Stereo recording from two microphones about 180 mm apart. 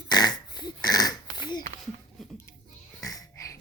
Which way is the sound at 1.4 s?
25° left (ahead or behind).